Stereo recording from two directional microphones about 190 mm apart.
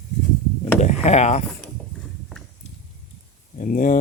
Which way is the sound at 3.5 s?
45° left (ahead or behind).